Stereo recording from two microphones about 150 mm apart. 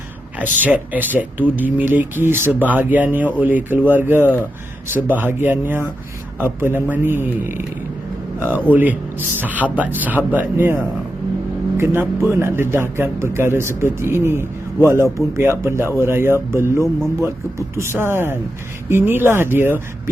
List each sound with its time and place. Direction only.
0.6 s speech: 10° right (ahead or behind)
11.8 s speech: 15° right (ahead or behind)